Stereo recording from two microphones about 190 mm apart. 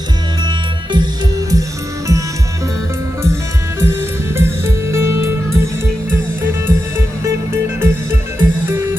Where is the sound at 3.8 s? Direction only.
10° right (ahead or behind).